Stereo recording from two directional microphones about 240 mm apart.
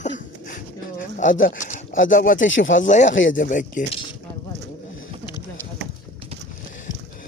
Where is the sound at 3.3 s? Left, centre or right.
Left.